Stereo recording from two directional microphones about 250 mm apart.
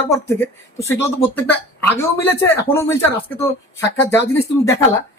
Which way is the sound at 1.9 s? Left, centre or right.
Centre.